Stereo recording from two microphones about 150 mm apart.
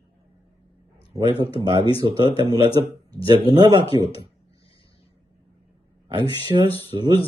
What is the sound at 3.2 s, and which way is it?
Speech, 35° left (ahead or behind).